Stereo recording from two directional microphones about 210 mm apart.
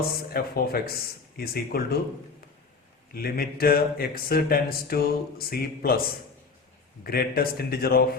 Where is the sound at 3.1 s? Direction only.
45° left (ahead or behind).